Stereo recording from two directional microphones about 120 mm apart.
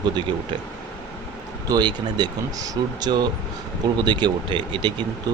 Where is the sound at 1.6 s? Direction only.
35° right (ahead or behind).